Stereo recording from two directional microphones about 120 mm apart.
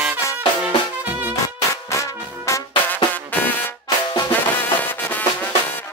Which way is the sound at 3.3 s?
15° left (ahead or behind).